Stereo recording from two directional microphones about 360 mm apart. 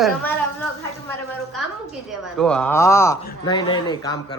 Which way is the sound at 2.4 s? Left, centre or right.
Centre.